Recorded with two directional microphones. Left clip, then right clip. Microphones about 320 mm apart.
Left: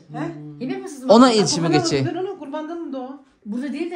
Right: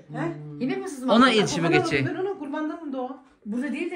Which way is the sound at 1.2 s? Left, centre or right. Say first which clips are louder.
Left 4 dB; centre.